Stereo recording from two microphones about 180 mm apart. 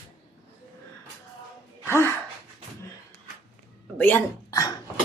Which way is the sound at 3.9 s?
10° left (ahead or behind).